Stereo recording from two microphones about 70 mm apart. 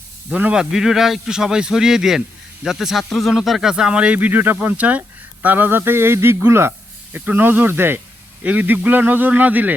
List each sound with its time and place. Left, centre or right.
0.3 s speech: right